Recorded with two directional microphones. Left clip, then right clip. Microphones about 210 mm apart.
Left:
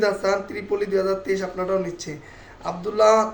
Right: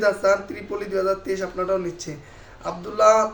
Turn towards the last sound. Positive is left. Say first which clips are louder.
# even
turn(degrees=-5)  # may be behind; listen again after turning